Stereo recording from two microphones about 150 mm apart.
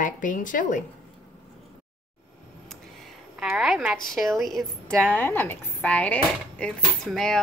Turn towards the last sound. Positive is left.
turn(degrees=5)  # may be behind; listen again after turning